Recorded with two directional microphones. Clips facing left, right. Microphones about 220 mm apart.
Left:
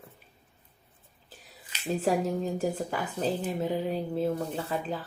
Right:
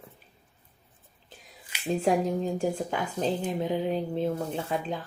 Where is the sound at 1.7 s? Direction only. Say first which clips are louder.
Right 1 dB; 10° right (ahead or behind).